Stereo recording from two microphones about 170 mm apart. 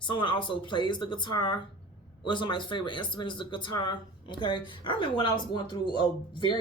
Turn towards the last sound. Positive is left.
turn(degrees=30)  # may be behind; listen again after turning